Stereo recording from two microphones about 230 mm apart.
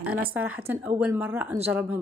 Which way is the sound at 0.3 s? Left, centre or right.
Centre.